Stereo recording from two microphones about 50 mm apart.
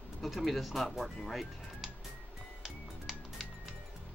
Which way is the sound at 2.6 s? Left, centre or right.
Centre.